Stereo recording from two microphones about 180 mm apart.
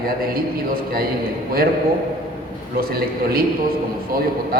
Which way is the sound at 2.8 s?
55° right (ahead or behind).